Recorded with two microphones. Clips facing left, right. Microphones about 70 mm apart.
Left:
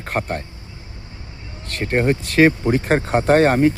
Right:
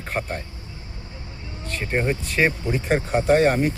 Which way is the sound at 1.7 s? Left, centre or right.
Left.